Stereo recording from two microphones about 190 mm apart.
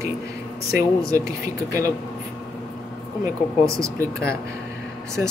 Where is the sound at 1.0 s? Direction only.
15° right (ahead or behind).